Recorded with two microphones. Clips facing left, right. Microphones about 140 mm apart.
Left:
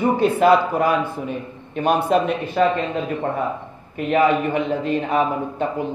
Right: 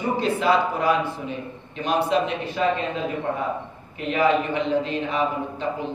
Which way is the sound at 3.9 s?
50° left (ahead or behind).